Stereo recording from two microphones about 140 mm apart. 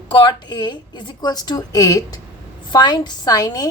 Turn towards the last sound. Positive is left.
turn(degrees=25)  # may be behind; listen again after turning